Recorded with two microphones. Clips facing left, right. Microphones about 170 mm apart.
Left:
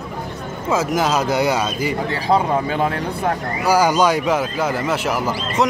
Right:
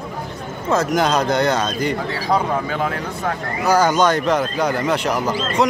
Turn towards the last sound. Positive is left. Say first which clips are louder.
# right 1 dB
turn(degrees=5)  # may be behind; listen again after turning